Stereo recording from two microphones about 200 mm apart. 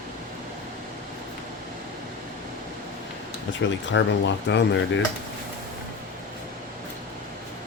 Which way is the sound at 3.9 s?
65° left (ahead or behind).